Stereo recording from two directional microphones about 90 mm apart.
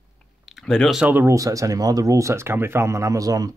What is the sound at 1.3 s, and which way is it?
Speech, 40° right (ahead or behind).